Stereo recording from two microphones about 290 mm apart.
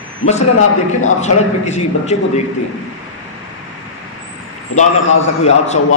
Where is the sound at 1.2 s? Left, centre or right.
Left.